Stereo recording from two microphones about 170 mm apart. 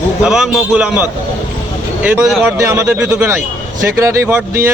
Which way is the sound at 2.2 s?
Centre (ahead or behind).